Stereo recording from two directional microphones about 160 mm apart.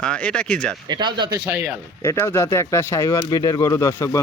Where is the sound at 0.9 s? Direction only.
30° right (ahead or behind).